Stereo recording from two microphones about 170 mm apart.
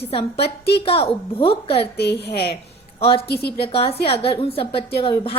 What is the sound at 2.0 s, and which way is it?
Speech, 75° left (ahead or behind).